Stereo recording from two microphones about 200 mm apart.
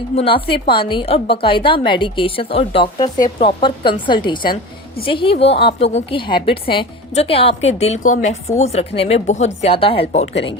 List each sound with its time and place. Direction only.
0.2 s a woman's voice: 25° left (ahead or behind)